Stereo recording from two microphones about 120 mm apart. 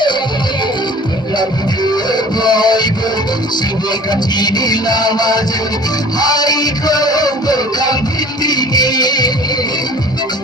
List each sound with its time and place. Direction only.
2.0 s music: 35° left (ahead or behind)
4.1 s music: 35° left (ahead or behind)